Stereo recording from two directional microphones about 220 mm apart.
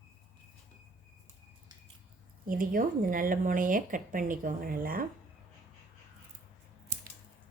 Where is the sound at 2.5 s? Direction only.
40° right (ahead or behind).